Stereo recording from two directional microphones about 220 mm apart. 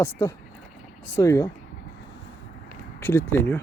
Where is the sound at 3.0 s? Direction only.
10° left (ahead or behind).